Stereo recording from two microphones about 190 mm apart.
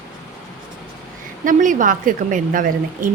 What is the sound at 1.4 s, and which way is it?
A woman's voice, 45° right (ahead or behind).